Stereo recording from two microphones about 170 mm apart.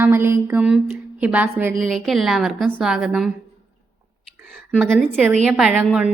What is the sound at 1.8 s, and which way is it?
A woman's voice, centre (ahead or behind).